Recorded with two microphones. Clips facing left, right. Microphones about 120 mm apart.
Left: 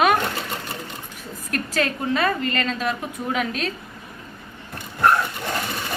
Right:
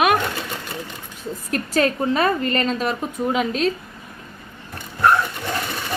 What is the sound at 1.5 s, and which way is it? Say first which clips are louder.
A woman's voice: right 4 dB; 35° right (ahead or behind).